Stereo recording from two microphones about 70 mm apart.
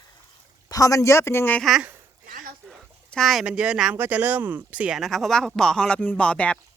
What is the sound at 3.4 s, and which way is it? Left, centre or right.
Speech, centre.